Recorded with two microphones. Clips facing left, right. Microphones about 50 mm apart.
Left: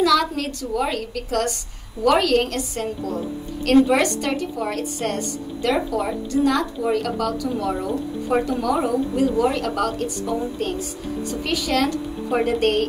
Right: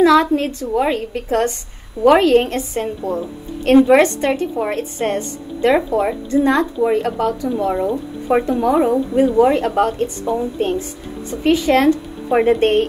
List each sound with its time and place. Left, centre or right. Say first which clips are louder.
0.0 s speech: right 6 dB; right